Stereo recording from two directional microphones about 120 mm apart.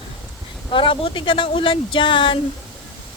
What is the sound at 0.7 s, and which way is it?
Speech, 45° left (ahead or behind).